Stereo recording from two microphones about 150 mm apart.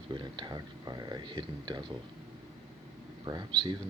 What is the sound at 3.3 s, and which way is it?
Speech, 25° right (ahead or behind).